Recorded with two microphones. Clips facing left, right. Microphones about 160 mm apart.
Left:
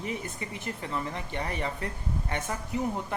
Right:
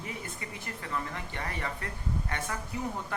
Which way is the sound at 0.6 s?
20° left (ahead or behind).